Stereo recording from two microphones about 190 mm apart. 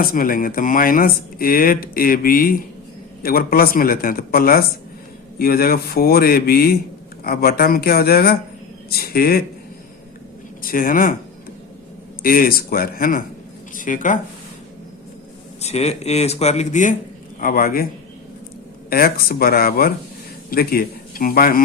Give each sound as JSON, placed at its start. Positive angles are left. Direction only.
{"t": 0.0, "sound": "speech", "side_deg": 50}
{"t": 10.6, "sound": "speech", "side_deg": 50}
{"t": 12.2, "sound": "speech", "side_deg": 50}
{"t": 15.6, "sound": "speech", "side_deg": 35}
{"t": 17.4, "sound": "speech", "side_deg": 50}
{"t": 18.9, "sound": "a man's voice", "side_deg": 50}